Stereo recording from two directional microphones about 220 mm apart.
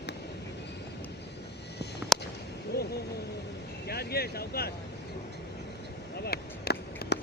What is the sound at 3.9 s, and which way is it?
Speech, 45° left (ahead or behind).